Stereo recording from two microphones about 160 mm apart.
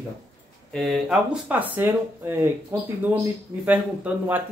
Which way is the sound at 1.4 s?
10° right (ahead or behind).